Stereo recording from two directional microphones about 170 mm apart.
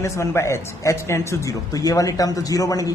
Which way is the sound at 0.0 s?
15° left (ahead or behind).